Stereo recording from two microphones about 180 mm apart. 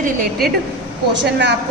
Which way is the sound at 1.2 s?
70° right (ahead or behind).